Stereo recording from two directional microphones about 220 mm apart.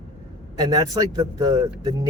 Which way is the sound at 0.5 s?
15° right (ahead or behind).